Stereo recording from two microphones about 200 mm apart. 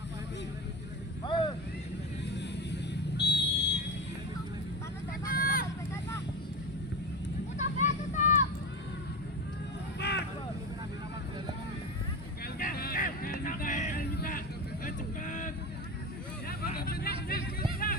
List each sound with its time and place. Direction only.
1.2 s vehicle: 25° left (ahead or behind)
2.3 s vehicle: 60° left (ahead or behind)
5.3 s vehicle: 45° left (ahead or behind)
7.6 s vehicle: 35° left (ahead or behind)
10.0 s vehicle: 60° left (ahead or behind)
12.5 s a sound: 45° left (ahead or behind)
14.8 s vehicle: 40° left (ahead or behind)
16.5 s hubbub: 50° left (ahead or behind)